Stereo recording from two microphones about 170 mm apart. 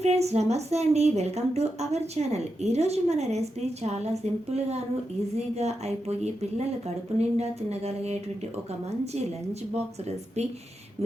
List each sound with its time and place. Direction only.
0.0 s a woman's voice: 40° right (ahead or behind)
5.5 s a woman's voice: 40° right (ahead or behind)
9.5 s a woman's voice: 40° right (ahead or behind)